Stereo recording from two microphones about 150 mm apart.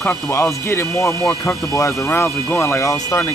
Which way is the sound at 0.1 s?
20° left (ahead or behind).